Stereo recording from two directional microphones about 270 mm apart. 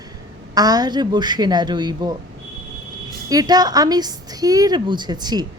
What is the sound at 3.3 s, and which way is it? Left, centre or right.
A woman's voice, centre.